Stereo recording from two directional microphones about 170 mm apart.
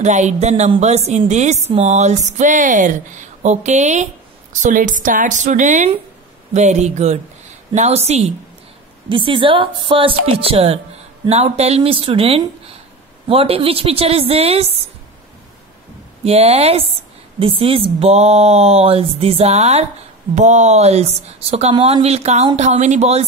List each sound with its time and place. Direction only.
0.0 s a woman's voice: 45° right (ahead or behind)
16.3 s speech: 40° right (ahead or behind)